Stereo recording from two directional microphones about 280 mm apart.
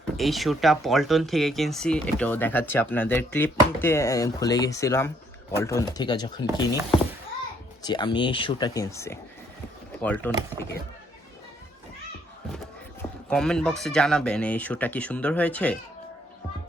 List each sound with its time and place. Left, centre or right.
0.2 s speech: centre
7.9 s speech: centre
13.0 s speech: centre